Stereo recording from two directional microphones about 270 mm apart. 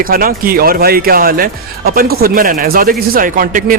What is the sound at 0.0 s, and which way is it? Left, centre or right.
A man's voice, right.